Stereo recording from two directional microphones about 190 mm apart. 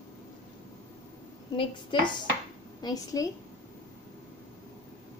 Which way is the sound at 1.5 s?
25° left (ahead or behind).